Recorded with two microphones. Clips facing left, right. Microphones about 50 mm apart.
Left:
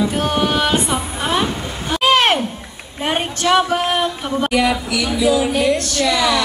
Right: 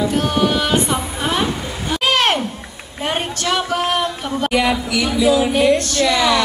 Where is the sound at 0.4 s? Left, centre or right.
Centre.